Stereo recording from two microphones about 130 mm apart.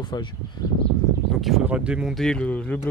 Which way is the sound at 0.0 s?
35° left (ahead or behind).